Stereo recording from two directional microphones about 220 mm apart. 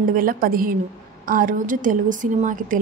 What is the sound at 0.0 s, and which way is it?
A woman's voice, 40° right (ahead or behind).